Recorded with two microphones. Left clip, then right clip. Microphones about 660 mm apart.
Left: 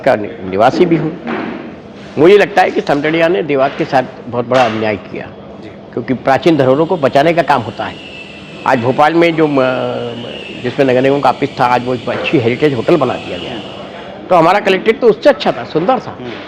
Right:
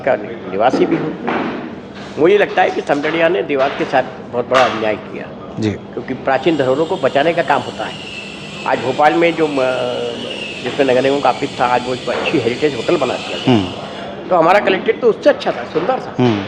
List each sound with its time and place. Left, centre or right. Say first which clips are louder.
0.0 s a man's voice: left 4 dB; left
2.2 s a man's voice: left 4 dB; left
6.1 s a man's voice: left 4 dB; left
14.3 s a man's voice: left 2 dB; left